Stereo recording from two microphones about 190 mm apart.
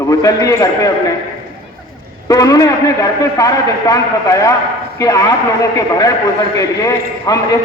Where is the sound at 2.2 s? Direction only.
20° left (ahead or behind).